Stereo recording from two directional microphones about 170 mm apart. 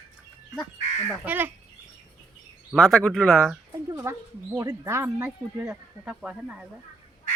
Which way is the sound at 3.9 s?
20° right (ahead or behind).